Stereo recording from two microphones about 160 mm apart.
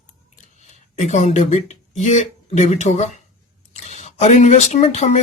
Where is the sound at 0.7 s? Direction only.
45° left (ahead or behind).